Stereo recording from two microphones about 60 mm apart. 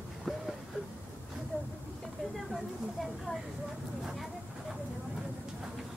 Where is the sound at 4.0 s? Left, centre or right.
Centre.